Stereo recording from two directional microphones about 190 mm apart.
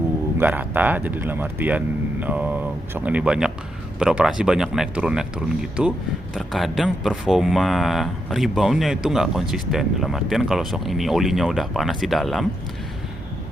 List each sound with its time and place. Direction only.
0.3 s speech: 10° right (ahead or behind)